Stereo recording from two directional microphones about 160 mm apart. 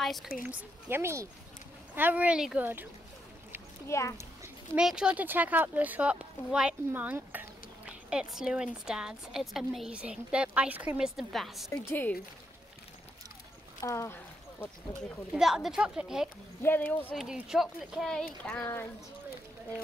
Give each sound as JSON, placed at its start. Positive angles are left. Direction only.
{"t": 0.0, "sound": "speech", "side_deg": 0}
{"t": 0.4, "sound": "speech", "side_deg": -15}
{"t": 3.8, "sound": "speech", "side_deg": 15}
{"t": 4.7, "sound": "a woman's voice", "side_deg": -5}
{"t": 11.9, "sound": "speech", "side_deg": 10}
{"t": 13.7, "sound": "a sound", "side_deg": 20}
{"t": 15.3, "sound": "a woman's voice", "side_deg": -5}
{"t": 18.4, "sound": "speech", "side_deg": 15}